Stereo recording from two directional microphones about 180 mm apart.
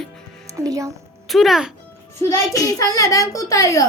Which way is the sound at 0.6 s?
20° right (ahead or behind).